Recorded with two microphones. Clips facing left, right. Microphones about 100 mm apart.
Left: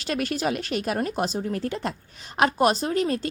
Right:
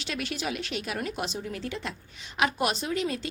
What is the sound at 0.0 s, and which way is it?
A woman's voice, 45° left (ahead or behind).